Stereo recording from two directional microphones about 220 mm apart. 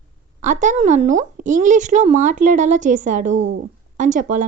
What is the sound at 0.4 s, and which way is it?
A woman's voice, 35° right (ahead or behind).